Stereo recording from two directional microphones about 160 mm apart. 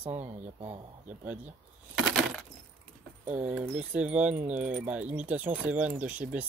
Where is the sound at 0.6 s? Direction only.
30° right (ahead or behind).